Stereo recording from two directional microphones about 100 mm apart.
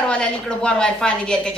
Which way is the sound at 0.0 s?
10° left (ahead or behind).